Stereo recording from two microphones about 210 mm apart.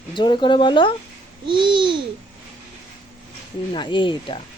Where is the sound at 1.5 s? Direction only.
20° right (ahead or behind).